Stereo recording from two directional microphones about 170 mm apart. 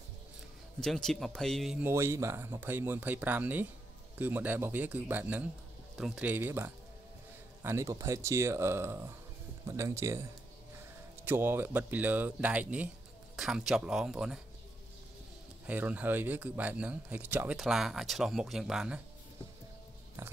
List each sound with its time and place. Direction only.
0.7 s speech: 5° left (ahead or behind)
1.8 s speech: 15° right (ahead or behind)
11.2 s speech: 15° right (ahead or behind)
15.6 s speech: 10° right (ahead or behind)
20.2 s speech: 15° right (ahead or behind)